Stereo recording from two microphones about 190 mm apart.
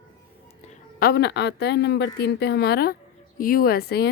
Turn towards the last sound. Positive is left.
turn(degrees=55)  # may be behind; listen again after turning